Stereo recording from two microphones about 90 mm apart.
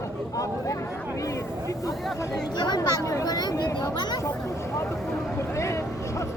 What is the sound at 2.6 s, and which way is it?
Speech, 55° left (ahead or behind).